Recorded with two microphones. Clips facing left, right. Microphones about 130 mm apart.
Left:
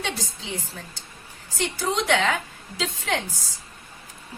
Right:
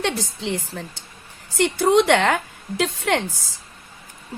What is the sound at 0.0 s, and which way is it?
A woman's voice, 70° right (ahead or behind).